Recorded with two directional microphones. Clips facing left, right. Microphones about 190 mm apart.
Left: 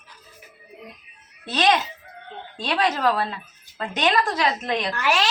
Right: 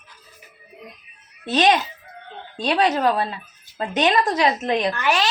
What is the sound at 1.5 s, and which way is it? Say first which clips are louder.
A woman's voice: right 3 dB; 20° right (ahead or behind).